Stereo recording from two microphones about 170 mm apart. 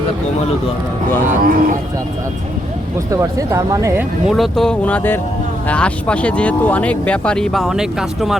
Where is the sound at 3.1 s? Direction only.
20° right (ahead or behind).